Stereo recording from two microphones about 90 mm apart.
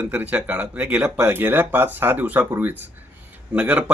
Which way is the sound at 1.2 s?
25° right (ahead or behind).